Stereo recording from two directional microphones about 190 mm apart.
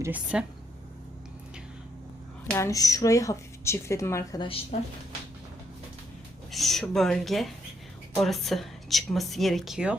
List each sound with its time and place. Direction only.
0.0 s speech: 5° right (ahead or behind)
2.5 s speech: 15° left (ahead or behind)
6.5 s speech: centre (ahead or behind)